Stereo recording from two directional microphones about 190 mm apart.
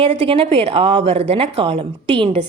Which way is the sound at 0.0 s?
30° right (ahead or behind).